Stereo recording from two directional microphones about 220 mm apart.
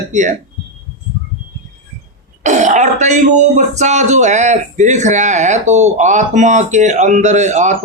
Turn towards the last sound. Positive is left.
turn(degrees=-35)  # may be behind; listen again after turning